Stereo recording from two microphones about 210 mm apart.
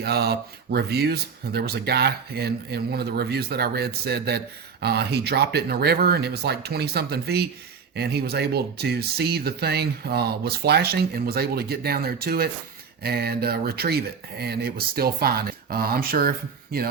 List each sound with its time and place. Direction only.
0.0 s speech: 50° right (ahead or behind)